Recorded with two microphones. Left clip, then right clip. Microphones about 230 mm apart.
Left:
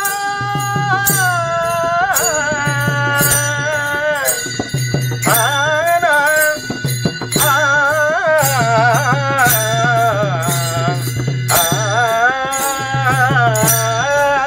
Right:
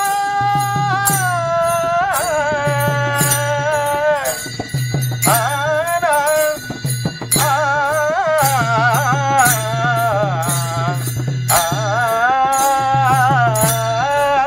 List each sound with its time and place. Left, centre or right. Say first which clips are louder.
0.4 s music: right 2 dB; right
5.2 s music: left 2 dB; right
11.6 s music: left 2 dB; right